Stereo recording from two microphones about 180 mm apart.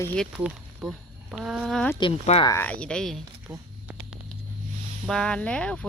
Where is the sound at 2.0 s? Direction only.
30° left (ahead or behind).